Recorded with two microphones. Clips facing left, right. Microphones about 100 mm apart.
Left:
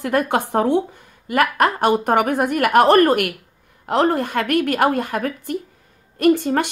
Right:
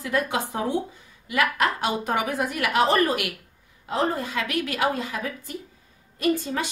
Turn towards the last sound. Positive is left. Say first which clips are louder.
# left 8 dB
turn(degrees=60)  # may be behind; listen again after turning